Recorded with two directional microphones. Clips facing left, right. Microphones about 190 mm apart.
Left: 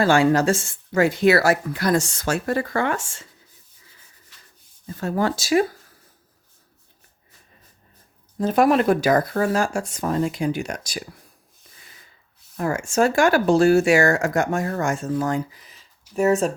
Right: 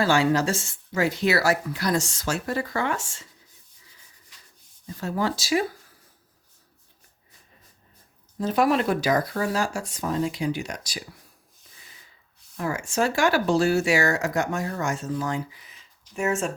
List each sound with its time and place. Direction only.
0.0 s speech: 50° left (ahead or behind)
4.9 s speech: 55° left (ahead or behind)
8.4 s speech: 50° left (ahead or behind)
12.5 s speech: 50° left (ahead or behind)